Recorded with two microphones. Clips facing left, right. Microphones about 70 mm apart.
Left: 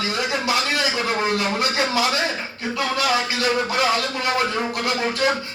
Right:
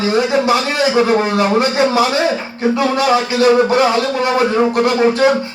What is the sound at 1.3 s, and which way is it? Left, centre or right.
Speech, right.